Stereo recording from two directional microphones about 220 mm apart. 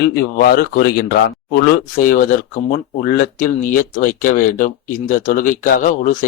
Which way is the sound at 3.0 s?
40° left (ahead or behind).